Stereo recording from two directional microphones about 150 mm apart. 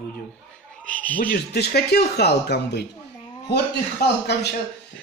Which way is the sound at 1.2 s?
85° left.